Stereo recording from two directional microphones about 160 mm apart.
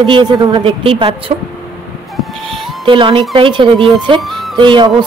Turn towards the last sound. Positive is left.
turn(degrees=-30)  # may be behind; listen again after turning